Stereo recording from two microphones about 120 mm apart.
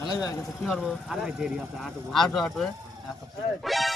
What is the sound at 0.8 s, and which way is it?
Speech, 5° right (ahead or behind).